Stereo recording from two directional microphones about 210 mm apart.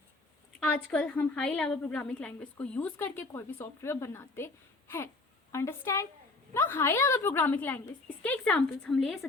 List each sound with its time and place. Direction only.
0.6 s a woman's voice: 5° left (ahead or behind)